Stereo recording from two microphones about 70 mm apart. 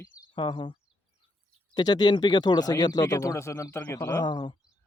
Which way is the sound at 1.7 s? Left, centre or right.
Left.